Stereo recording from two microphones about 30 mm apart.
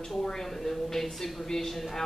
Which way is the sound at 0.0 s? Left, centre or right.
Centre.